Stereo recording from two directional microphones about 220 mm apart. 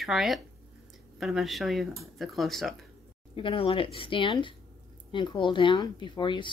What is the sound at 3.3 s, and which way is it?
Speech, 25° left (ahead or behind).